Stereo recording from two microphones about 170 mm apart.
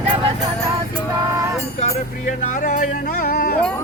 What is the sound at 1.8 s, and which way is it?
Speech, 50° left (ahead or behind).